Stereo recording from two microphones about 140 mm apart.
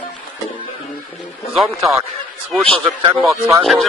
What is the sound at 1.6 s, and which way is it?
Speech, 20° right (ahead or behind).